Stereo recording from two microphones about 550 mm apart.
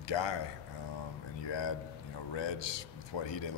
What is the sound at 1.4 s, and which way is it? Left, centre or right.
A man's voice, left.